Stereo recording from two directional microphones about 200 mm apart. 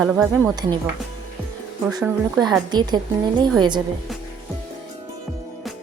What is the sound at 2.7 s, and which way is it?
Speech, 20° right (ahead or behind).